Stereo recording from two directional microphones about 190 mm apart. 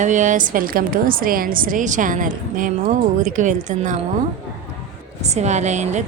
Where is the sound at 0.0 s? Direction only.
40° right (ahead or behind).